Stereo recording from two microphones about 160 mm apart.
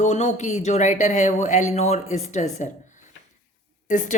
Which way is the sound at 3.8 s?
50° left (ahead or behind).